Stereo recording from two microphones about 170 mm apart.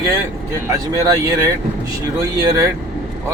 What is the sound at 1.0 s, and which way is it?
Speech, 20° right (ahead or behind).